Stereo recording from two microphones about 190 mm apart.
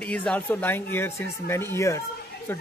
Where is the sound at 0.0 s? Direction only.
5° left (ahead or behind).